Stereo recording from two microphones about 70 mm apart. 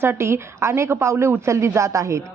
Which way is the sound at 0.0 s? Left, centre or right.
Right.